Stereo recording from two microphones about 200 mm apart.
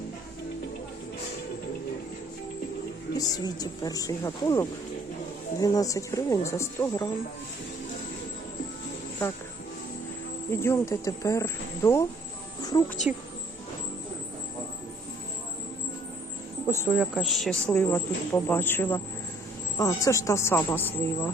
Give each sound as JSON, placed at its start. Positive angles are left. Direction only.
{"t": 3.2, "sound": "speech", "side_deg": 20}
{"t": 10.5, "sound": "speech", "side_deg": 10}
{"t": 13.1, "sound": "speech", "side_deg": -5}
{"t": 16.8, "sound": "speech", "side_deg": -5}